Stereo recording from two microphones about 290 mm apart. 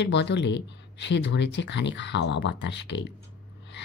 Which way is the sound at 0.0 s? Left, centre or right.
Left.